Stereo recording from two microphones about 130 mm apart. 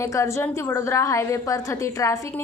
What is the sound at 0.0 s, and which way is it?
A woman's voice, 20° left (ahead or behind).